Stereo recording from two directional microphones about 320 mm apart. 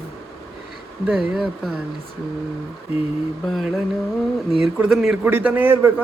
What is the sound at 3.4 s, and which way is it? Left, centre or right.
Speech, centre.